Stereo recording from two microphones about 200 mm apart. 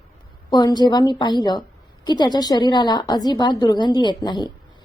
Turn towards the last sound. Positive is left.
turn(degrees=20)  # may be behind; listen again after turning